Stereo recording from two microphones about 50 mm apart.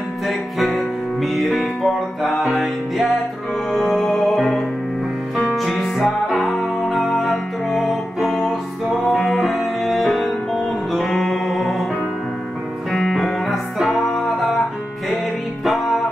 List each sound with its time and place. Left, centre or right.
0.3 s music: centre
12.9 s music: centre
15.6 s music: centre